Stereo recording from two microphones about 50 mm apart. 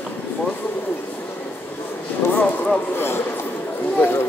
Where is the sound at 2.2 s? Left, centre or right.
Left.